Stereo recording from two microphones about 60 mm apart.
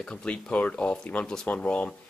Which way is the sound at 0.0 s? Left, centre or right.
Centre.